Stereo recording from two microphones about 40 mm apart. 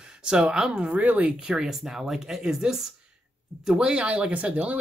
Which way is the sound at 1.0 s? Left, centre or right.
Right.